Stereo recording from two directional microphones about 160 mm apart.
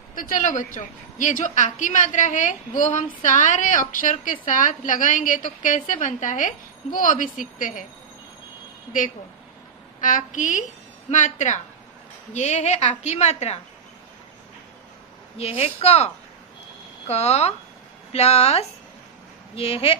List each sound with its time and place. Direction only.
0.1 s a woman's voice: 60° left (ahead or behind)
10.0 s a woman's voice: 55° left (ahead or behind)
15.3 s a woman's voice: 40° left (ahead or behind)
17.1 s a woman's voice: 40° left (ahead or behind)